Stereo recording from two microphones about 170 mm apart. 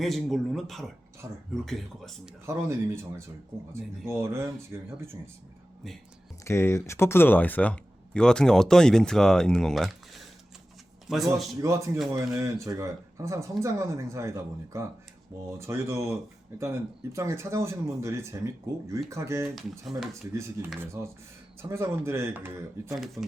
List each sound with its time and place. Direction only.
0.0 s speech: centre (ahead or behind)
1.2 s speech: 20° right (ahead or behind)
1.6 s speech: centre (ahead or behind)
2.5 s speech: 15° right (ahead or behind)
6.4 s speech: 15° left (ahead or behind); by 11.2 s 5° right (ahead or behind)
11.6 s speech: 20° right (ahead or behind)
19.8 s speech: centre (ahead or behind)
20.7 s speech: 15° right (ahead or behind)